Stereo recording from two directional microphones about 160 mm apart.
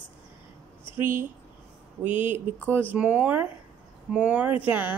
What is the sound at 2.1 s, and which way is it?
Speech, 10° right (ahead or behind).